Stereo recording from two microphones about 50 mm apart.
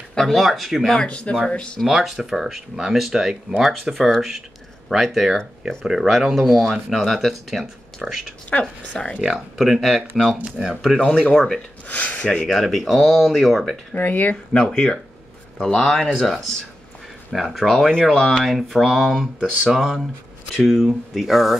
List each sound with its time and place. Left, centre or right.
0.1 s speech: centre
1.0 s speech: left
1.8 s speech: centre
8.5 s speech: left
9.2 s speech: centre
10.4 s speech: centre
11.0 s speech: centre
11.9 s speech: left
12.3 s speech: centre
12.5 s speech: centre
13.9 s speech: left
14.3 s speech: centre
15.8 s speech: centre